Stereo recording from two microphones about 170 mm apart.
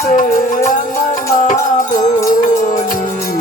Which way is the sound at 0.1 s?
50° left (ahead or behind).